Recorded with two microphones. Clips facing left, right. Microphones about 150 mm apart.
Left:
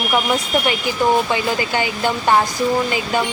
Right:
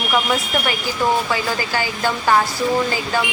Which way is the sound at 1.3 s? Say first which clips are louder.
Left 2 dB; 20° left (ahead or behind).